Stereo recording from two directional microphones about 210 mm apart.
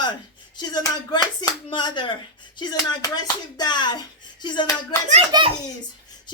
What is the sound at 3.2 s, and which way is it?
Speech, 20° left (ahead or behind).